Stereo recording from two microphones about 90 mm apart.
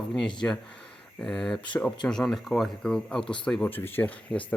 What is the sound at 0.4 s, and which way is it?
Speech, 20° left (ahead or behind).